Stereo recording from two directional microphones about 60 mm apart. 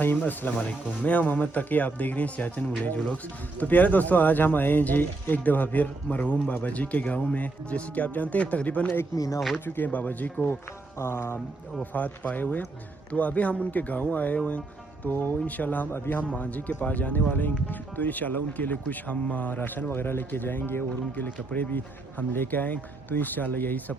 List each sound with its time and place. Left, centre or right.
0.0 s speech: left
9.1 s speech: left
9.6 s speech: left
10.5 s speech: left
11.8 s speech: left